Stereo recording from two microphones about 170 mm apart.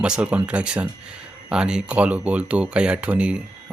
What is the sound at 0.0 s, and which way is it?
Speech, 5° right (ahead or behind).